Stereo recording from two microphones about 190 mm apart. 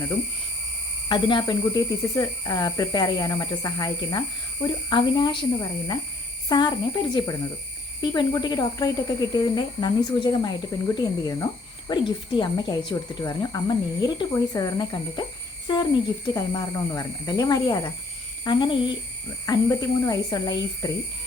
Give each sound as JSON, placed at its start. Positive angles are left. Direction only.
{"t": 1.0, "sound": "speech", "side_deg": 25}